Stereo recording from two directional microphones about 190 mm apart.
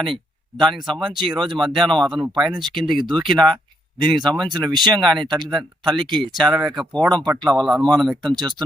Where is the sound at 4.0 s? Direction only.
20° right (ahead or behind).